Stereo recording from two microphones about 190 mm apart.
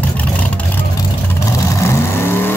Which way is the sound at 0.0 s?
10° left (ahead or behind).